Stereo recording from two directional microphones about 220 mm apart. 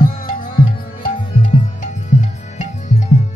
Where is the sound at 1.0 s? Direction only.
35° left (ahead or behind).